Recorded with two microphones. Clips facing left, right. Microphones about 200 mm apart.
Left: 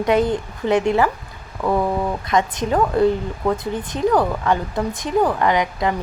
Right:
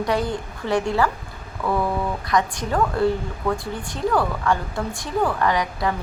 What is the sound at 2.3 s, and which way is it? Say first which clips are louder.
A woman's voice: left 3 dB; 20° left (ahead or behind).